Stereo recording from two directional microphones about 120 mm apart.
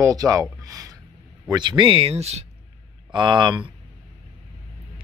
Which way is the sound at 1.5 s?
40° right (ahead or behind).